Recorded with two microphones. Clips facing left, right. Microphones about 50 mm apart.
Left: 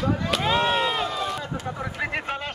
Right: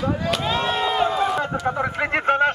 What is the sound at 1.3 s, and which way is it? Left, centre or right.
Speech, right.